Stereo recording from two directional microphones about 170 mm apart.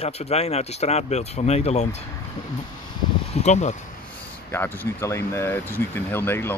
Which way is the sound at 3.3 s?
40° left (ahead or behind).